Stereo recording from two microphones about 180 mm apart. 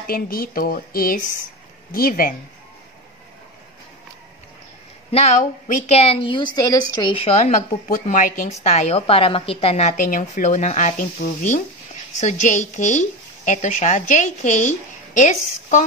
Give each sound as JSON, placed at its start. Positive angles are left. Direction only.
{"t": 0.0, "sound": "a woman's voice", "side_deg": 55}
{"t": 5.1, "sound": "a woman's voice", "side_deg": 40}